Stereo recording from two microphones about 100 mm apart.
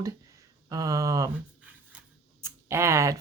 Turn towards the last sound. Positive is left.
turn(degrees=-30)  # may be behind; listen again after turning